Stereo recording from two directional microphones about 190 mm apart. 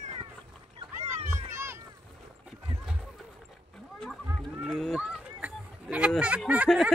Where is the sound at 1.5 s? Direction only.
15° right (ahead or behind).